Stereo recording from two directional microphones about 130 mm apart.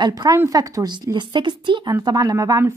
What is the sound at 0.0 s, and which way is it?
Speech, 30° right (ahead or behind).